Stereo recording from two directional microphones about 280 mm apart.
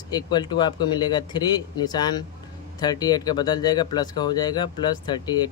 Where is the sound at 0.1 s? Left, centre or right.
Centre.